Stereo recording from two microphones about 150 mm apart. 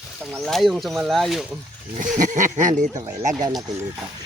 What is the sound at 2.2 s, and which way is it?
Speech, 55° right (ahead or behind).